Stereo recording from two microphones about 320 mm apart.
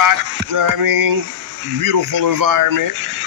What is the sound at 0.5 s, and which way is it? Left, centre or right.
Speech, right.